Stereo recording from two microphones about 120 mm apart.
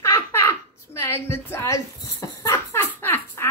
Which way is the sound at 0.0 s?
20° left (ahead or behind).